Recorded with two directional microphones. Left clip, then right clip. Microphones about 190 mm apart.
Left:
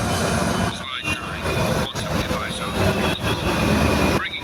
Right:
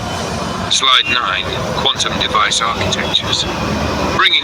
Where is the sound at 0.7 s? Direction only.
45° right (ahead or behind).